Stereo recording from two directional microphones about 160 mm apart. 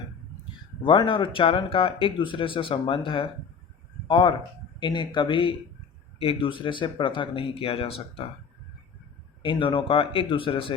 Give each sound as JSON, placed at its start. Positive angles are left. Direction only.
{"t": 0.8, "sound": "speech", "side_deg": 30}
{"t": 9.4, "sound": "speech", "side_deg": 30}